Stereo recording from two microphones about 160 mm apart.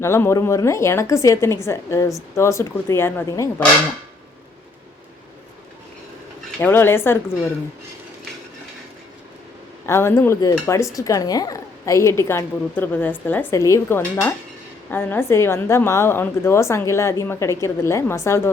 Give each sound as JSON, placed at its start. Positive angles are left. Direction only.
{"t": 0.0, "sound": "speech", "side_deg": 15}
{"t": 6.6, "sound": "speech", "side_deg": 15}
{"t": 9.8, "sound": "speech", "side_deg": 15}